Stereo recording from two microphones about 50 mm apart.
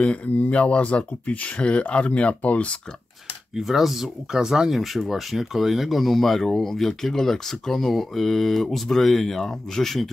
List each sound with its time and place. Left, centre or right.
0.0 s speech: left
3.5 s speech: centre